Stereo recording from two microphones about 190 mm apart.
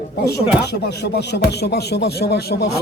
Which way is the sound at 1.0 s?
60° left (ahead or behind).